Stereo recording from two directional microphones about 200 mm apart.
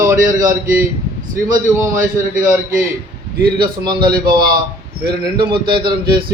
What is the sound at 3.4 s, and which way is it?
A man's voice, 20° right (ahead or behind).